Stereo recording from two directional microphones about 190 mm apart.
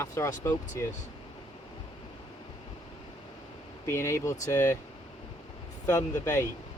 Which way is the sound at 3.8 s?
15° left (ahead or behind).